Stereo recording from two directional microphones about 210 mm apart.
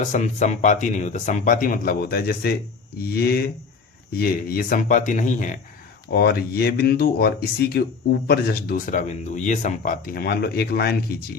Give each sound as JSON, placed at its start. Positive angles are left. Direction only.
{"t": 0.0, "sound": "speech", "side_deg": 35}
{"t": 6.1, "sound": "speech", "side_deg": 50}